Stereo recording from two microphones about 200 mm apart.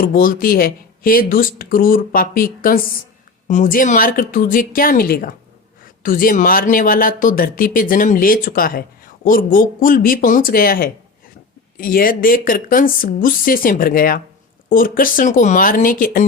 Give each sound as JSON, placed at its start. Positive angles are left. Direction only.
{"t": 0.0, "sound": "speech", "side_deg": 45}